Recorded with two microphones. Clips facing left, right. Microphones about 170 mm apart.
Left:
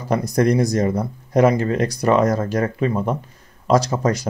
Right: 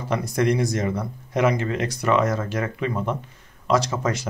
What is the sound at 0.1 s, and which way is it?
Speech, 40° left (ahead or behind).